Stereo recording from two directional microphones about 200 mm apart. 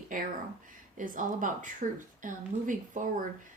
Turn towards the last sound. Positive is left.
turn(degrees=-40)  # may be behind; listen again after turning